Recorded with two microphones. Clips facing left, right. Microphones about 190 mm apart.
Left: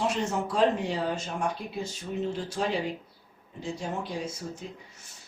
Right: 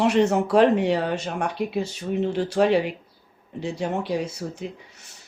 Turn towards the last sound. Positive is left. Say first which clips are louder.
# right 6 dB
turn(degrees=-70)  # may be behind; listen again after turning